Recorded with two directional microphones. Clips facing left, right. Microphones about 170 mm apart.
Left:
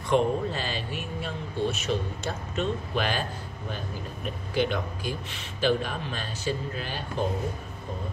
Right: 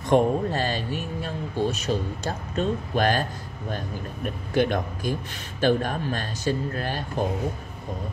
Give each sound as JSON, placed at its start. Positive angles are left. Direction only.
{"t": 0.1, "sound": "speech", "side_deg": -45}